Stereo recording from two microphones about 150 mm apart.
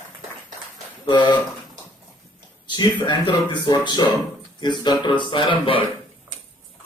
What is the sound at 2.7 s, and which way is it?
Speech, 30° left (ahead or behind).